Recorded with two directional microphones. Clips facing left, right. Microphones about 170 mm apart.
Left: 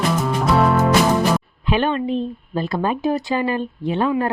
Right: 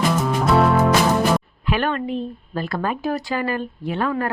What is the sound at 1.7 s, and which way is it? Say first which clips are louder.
Speech: left 3 dB; 20° left (ahead or behind).